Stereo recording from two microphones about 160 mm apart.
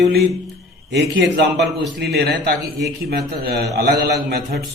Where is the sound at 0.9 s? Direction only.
90° right; by 4.6 s 75° right (ahead or behind).